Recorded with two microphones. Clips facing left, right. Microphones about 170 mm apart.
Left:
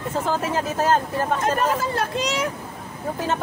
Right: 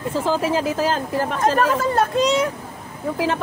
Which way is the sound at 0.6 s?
90° right.